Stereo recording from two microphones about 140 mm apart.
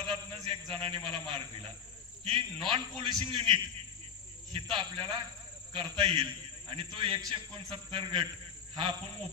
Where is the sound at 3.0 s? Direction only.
40° right (ahead or behind).